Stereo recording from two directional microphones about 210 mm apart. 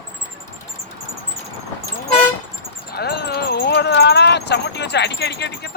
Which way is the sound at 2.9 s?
50° left (ahead or behind).